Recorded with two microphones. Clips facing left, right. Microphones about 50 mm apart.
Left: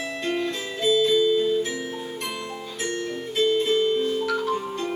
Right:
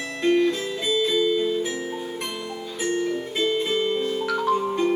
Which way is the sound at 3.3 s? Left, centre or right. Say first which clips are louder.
Left 5 dB; centre.